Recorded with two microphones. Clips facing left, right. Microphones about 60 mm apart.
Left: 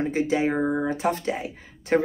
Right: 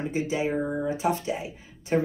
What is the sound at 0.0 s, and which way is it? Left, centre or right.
Speech, left.